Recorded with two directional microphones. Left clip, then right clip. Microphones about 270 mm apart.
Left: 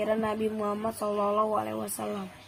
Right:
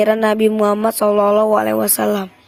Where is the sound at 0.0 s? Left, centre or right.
Right.